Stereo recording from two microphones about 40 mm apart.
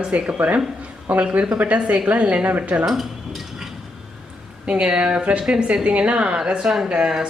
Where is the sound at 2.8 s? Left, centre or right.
Centre.